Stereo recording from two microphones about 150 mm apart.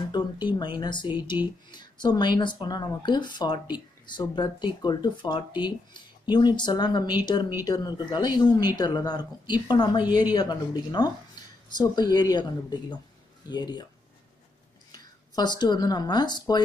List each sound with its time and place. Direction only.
0.1 s speech: 30° left (ahead or behind)
14.9 s speech: 30° left (ahead or behind)